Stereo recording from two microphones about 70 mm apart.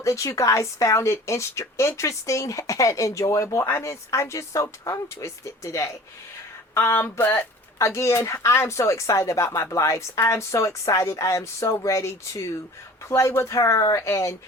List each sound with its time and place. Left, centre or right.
0.0 s speech: left
7.8 s speech: left